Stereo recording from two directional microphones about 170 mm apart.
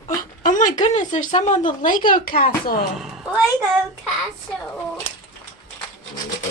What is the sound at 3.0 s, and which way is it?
Speech, 5° right (ahead or behind).